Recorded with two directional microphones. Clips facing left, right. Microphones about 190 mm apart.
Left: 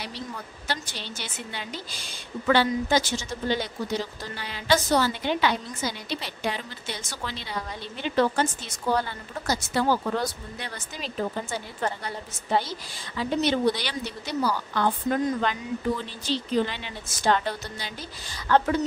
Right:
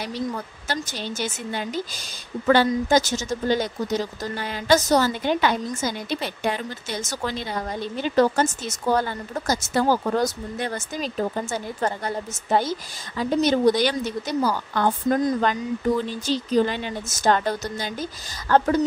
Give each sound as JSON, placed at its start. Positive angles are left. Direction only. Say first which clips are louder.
{"t": 0.0, "sound": "a woman's voice", "louder": "right 8 dB", "side_deg": -45}